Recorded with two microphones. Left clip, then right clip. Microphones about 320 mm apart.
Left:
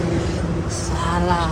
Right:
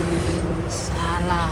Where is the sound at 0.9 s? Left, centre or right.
Centre.